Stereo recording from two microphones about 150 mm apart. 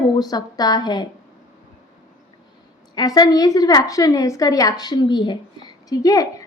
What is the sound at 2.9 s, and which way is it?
A woman's voice, 25° left (ahead or behind).